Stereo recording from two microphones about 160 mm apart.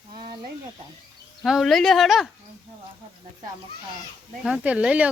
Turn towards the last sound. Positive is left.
turn(degrees=-5)  # may be behind; listen again after turning